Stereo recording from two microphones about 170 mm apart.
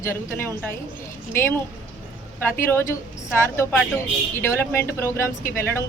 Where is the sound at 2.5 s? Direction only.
15° left (ahead or behind).